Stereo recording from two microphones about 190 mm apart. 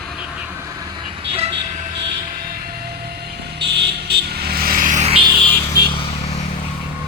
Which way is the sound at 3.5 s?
60° right (ahead or behind).